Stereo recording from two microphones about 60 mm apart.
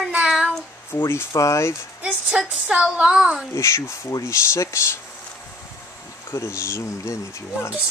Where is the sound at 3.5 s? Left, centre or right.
Left.